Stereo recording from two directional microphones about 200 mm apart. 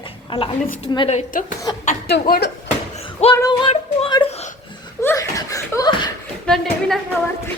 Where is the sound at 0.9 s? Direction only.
25° left (ahead or behind).